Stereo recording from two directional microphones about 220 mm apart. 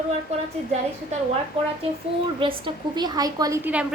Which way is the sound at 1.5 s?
25° right (ahead or behind).